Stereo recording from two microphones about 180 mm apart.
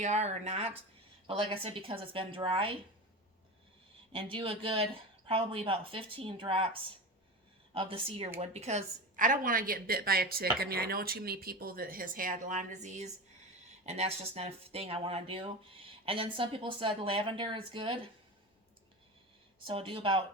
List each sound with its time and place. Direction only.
0.0 s speech: 40° right (ahead or behind)
4.1 s speech: 30° right (ahead or behind)
7.7 s speech: 30° right (ahead or behind)
19.6 s speech: 30° right (ahead or behind)